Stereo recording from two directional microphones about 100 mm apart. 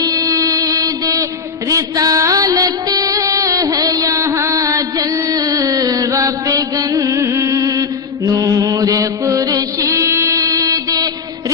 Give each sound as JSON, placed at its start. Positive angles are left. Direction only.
{"t": 0.0, "sound": "a sound", "side_deg": -35}
{"t": 1.7, "sound": "music", "side_deg": -35}
{"t": 8.3, "sound": "mantra", "side_deg": -35}